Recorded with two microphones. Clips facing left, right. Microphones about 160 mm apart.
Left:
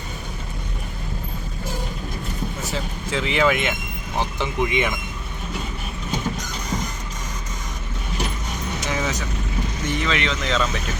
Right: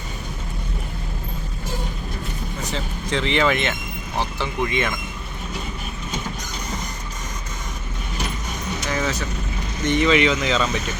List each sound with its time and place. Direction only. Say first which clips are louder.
2.7 s speech: right 2 dB; 5° left (ahead or behind)
8.9 s vehicle: right 1 dB; 15° left (ahead or behind)
9.8 s speech: right 8 dB; centre (ahead or behind)